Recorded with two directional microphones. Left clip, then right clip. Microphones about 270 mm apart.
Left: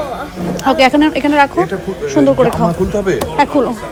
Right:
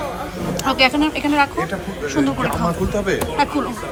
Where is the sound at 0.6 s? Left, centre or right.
Left.